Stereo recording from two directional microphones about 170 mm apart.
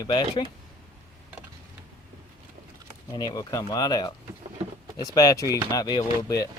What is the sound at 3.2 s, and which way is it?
Speech, 25° left (ahead or behind).